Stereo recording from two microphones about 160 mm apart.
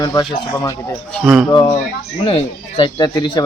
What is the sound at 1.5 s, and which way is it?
Speech, 30° left (ahead or behind).